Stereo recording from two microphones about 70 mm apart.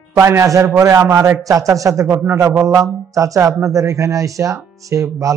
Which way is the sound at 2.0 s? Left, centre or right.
Right.